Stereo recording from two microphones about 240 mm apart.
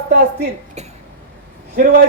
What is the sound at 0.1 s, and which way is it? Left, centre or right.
Dishes, right.